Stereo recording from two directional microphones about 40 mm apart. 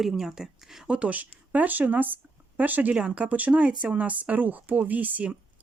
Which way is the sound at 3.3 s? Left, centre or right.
Right.